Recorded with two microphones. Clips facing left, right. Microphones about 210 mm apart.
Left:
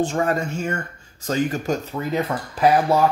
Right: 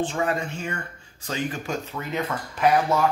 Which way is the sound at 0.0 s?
45° left (ahead or behind).